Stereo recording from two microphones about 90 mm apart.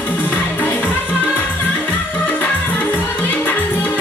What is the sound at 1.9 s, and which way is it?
Music, 20° left (ahead or behind).